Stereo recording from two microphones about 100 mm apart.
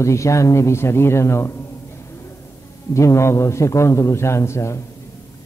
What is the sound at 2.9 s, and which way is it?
A man's voice, 30° left (ahead or behind).